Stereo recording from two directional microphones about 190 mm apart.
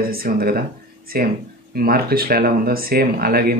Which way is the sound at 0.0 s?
50° right (ahead or behind).